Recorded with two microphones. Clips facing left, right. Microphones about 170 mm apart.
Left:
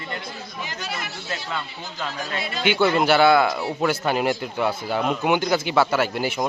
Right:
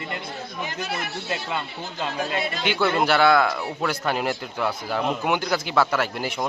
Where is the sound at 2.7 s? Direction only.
Centre (ahead or behind).